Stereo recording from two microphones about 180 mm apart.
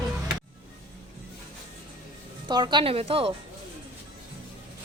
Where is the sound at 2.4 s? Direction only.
25° right (ahead or behind).